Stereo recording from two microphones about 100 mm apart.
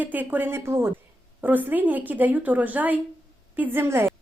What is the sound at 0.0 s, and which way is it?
A woman's voice, 15° right (ahead or behind).